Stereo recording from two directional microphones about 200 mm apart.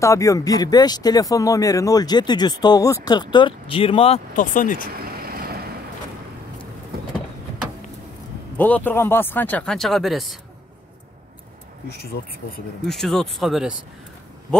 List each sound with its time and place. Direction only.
0.0 s speech: 15° left (ahead or behind); by 4.8 s 40° left (ahead or behind)
4.9 s vehicle: 50° right (ahead or behind)
8.5 s speech: 10° left (ahead or behind)
11.9 s speech: 50° left (ahead or behind)
12.8 s speech: centre (ahead or behind)